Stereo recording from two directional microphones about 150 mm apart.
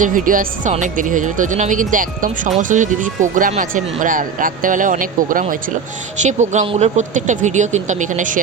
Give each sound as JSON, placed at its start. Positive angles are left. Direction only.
{"t": 0.0, "sound": "speech", "side_deg": -65}
{"t": 6.2, "sound": "speech", "side_deg": -55}